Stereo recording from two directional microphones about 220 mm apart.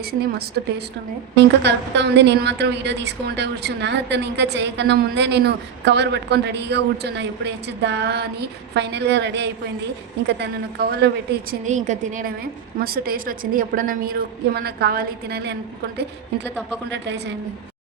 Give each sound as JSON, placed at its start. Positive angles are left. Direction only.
{"t": 0.1, "sound": "a woman's voice", "side_deg": -45}
{"t": 1.6, "sound": "a woman's voice", "side_deg": -50}
{"t": 11.6, "sound": "a woman's voice", "side_deg": -35}
{"t": 16.9, "sound": "a woman's voice", "side_deg": -55}